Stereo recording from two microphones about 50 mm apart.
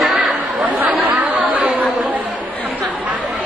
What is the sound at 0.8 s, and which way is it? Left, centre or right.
Chatter, right.